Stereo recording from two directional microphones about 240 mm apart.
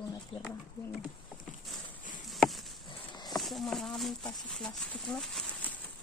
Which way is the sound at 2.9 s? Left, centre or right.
Centre.